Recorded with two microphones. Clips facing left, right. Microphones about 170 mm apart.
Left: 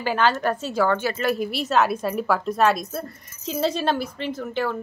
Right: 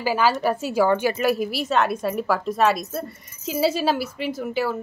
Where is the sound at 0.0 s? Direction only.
5° right (ahead or behind).